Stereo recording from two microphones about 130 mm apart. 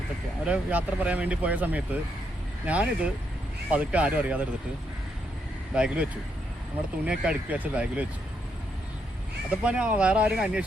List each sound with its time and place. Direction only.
0.4 s speech: 10° right (ahead or behind)
5.7 s speech: 10° right (ahead or behind)
9.5 s speech: 10° right (ahead or behind)